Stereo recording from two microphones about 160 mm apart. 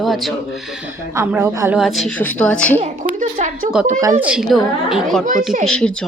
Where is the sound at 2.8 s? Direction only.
50° right (ahead or behind).